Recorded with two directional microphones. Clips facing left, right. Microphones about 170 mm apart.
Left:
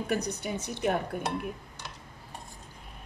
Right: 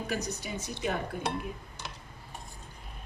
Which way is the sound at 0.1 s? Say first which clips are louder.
Left 5 dB; 60° left (ahead or behind).